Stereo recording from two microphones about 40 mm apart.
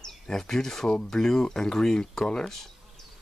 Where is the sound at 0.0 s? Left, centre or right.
Centre.